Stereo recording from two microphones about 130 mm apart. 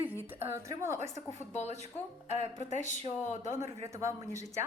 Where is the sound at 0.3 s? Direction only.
20° right (ahead or behind).